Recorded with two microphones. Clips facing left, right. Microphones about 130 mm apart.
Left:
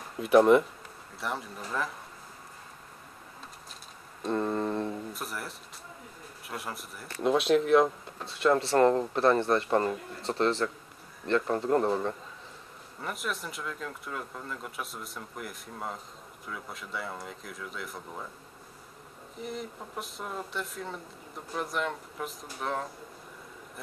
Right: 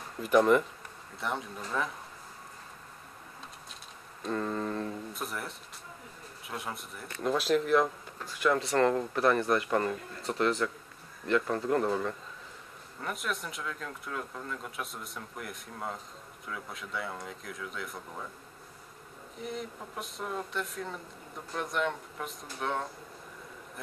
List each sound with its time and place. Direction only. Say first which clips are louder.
0.2 s speech: left 3 dB; centre (ahead or behind)
4.4 s a sound: left 4 dB; 30° left (ahead or behind)
5.1 s speech: even; centre (ahead or behind)
7.8 s speech: left 4 dB; 30° left (ahead or behind)
13.0 s speech: even; centre (ahead or behind)
19.3 s speech: left 1 dB; centre (ahead or behind)